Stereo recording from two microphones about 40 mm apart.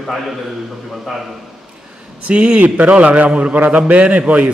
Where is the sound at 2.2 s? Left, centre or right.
Right.